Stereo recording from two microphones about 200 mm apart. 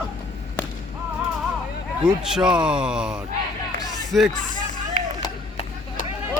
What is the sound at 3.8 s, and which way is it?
Music, 20° left (ahead or behind).